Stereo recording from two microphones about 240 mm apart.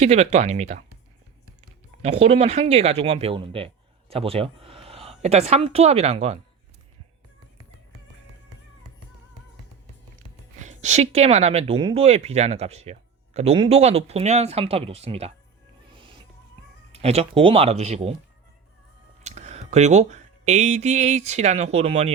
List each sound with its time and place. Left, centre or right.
0.0 s a woman's voice: right
2.0 s a woman's voice: right
10.6 s a woman's voice: right
15.9 s music: right
16.9 s a woman's voice: right
19.2 s speech: right